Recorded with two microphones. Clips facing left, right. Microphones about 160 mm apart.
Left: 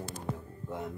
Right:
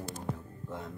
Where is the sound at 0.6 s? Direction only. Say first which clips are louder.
Left 3 dB; 15° left (ahead or behind).